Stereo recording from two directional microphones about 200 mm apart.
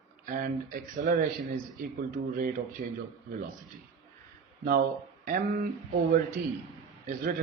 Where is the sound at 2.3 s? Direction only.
45° right (ahead or behind).